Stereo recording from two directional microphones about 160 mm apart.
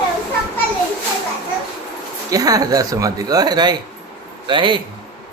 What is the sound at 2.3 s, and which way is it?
A man's voice, 20° right (ahead or behind).